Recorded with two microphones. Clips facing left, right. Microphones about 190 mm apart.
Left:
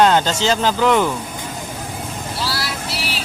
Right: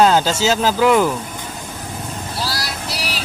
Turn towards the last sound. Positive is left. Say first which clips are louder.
# even
turn(degrees=-40)  # may be behind; listen again after turning